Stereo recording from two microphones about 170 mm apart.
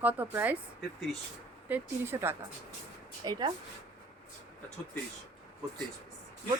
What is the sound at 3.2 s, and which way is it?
Speech, 25° right (ahead or behind).